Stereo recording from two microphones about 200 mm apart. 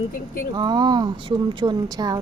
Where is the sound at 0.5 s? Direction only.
20° right (ahead or behind).